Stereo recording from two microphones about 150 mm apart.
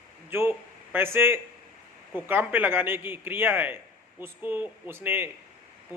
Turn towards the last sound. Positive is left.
turn(degrees=-15)  # may be behind; listen again after turning